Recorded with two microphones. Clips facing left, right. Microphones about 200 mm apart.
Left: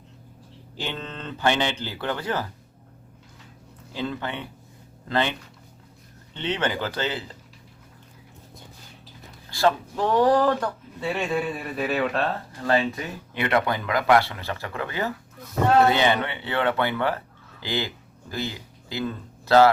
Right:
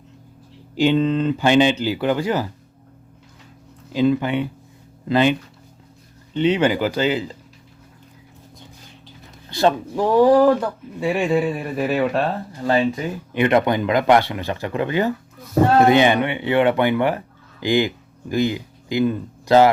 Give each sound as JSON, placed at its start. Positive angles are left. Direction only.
{"t": 0.8, "sound": "speech", "side_deg": -15}
{"t": 3.9, "sound": "speech", "side_deg": -15}
{"t": 9.5, "sound": "speech", "side_deg": -20}
{"t": 13.3, "sound": "speech", "side_deg": -20}